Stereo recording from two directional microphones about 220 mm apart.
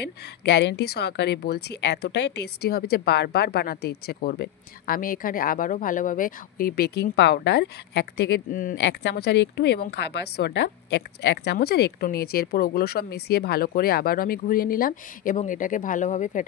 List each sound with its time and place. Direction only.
0.5 s a woman's voice: 50° left (ahead or behind)
8.7 s a woman's voice: 55° left (ahead or behind); by 16.4 s 35° left (ahead or behind)